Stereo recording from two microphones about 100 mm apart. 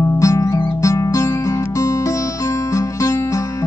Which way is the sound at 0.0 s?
30° left (ahead or behind).